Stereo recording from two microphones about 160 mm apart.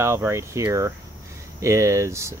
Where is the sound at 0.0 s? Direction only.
15° right (ahead or behind).